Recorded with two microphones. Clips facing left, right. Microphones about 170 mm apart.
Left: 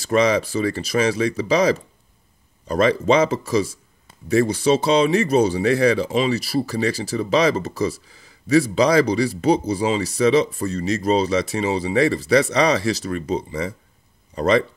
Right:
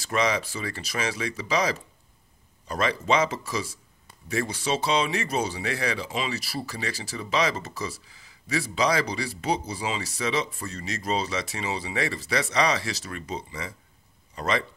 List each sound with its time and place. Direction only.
0.1 s speech: 35° left (ahead or behind)